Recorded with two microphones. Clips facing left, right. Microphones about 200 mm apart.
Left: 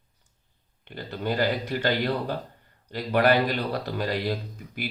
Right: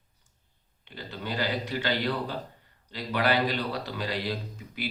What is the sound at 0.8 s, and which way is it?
Speech, 50° left (ahead or behind).